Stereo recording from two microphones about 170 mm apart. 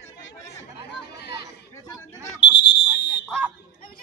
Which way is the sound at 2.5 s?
90° left.